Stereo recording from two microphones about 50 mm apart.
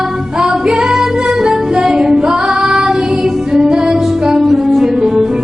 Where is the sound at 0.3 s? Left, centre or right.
Centre.